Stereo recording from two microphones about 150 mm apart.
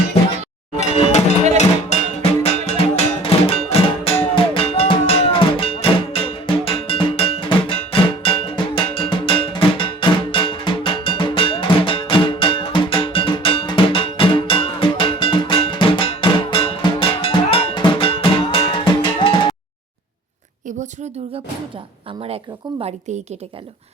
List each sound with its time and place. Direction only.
0.8 s music: 45° left (ahead or behind)
22.8 s a woman's voice: 45° right (ahead or behind)